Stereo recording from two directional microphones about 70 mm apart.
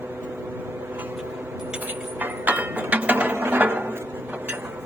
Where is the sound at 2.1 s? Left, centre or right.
Right.